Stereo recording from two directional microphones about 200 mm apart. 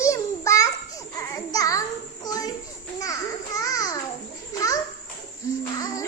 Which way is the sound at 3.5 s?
15° left (ahead or behind).